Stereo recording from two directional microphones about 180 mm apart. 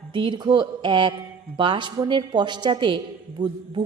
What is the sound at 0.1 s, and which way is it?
A woman's voice, 25° right (ahead or behind).